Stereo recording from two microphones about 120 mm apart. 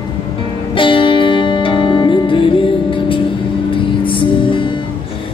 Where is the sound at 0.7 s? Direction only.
45° left (ahead or behind).